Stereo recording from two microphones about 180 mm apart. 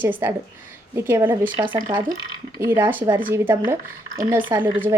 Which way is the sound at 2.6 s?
10° right (ahead or behind).